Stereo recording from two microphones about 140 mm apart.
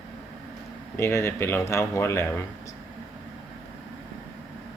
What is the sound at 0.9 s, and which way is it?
Speech, 20° left (ahead or behind).